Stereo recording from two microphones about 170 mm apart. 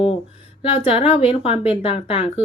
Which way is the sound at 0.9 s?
35° left (ahead or behind).